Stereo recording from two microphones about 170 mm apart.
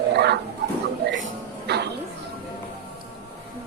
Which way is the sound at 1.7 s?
75° right (ahead or behind).